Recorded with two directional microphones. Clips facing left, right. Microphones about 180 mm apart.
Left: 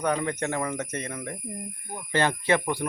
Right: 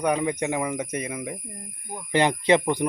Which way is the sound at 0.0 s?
10° right (ahead or behind).